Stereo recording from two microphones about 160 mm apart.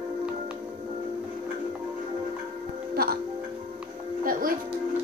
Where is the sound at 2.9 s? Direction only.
70° right (ahead or behind).